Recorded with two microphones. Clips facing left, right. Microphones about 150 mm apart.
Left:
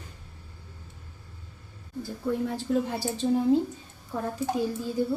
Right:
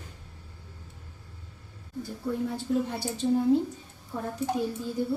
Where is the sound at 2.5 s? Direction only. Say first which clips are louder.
Left 1 dB; 90° left.